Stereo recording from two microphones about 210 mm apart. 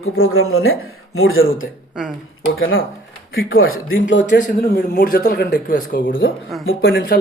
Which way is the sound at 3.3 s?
70° left (ahead or behind).